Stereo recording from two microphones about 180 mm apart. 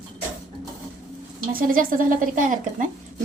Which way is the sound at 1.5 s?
50° right (ahead or behind).